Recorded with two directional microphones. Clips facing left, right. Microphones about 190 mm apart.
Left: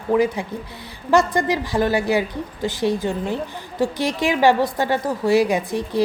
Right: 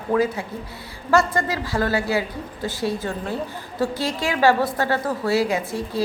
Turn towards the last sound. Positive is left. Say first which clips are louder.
# left 3 dB
turn(degrees=15)  # may be behind; listen again after turning